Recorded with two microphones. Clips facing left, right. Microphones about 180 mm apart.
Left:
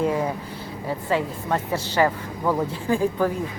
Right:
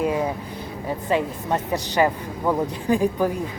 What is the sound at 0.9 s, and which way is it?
Speech, 15° right (ahead or behind).